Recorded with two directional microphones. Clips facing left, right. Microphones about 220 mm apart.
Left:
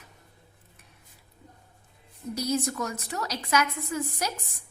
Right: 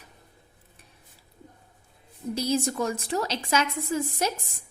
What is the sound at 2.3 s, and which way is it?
Speech, 30° right (ahead or behind).